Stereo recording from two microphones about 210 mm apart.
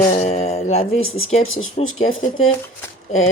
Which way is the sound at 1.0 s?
75° left (ahead or behind).